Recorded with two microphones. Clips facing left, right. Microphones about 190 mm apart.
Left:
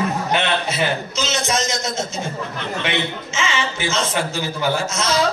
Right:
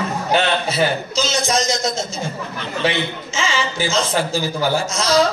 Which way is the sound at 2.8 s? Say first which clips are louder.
Right 6 dB; 35° right (ahead or behind).